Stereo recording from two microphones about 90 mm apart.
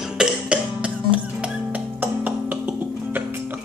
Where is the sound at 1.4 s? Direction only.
15° right (ahead or behind).